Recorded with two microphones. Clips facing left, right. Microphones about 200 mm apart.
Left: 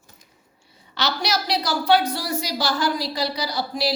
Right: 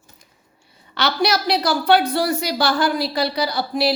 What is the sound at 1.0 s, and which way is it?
A woman's voice, 55° right (ahead or behind).